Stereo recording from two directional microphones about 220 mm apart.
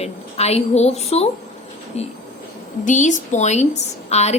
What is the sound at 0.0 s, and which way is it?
A woman's voice, 30° left (ahead or behind).